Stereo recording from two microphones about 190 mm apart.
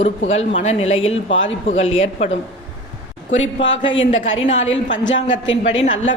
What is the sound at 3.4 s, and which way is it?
Speech, 80° left.